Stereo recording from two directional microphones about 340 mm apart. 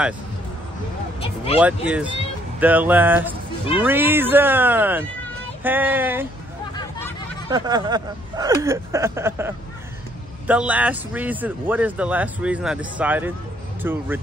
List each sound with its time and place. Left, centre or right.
1.6 s speech: centre
7.4 s speech: centre